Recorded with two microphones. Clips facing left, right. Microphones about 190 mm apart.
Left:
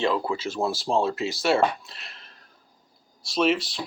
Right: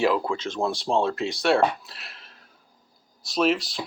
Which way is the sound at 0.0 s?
Centre (ahead or behind).